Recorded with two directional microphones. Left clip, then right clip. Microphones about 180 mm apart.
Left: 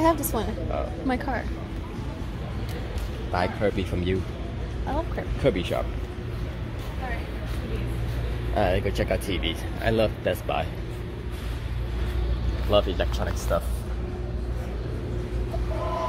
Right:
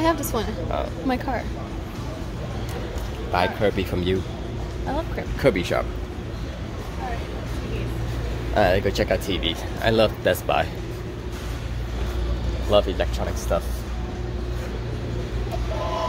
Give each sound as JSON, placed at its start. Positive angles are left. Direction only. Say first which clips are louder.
{"t": 0.0, "sound": "a woman's voice", "louder": "right 1 dB", "side_deg": 15}
{"t": 1.0, "sound": "speech", "louder": "right 1 dB", "side_deg": 0}
{"t": 3.3, "sound": "speech", "louder": "right 4 dB", "side_deg": 0}
{"t": 5.4, "sound": "speech", "louder": "right 4 dB", "side_deg": -15}
{"t": 8.5, "sound": "speech", "louder": "right 5 dB", "side_deg": -5}
{"t": 12.7, "sound": "speech", "louder": "right 3 dB", "side_deg": 5}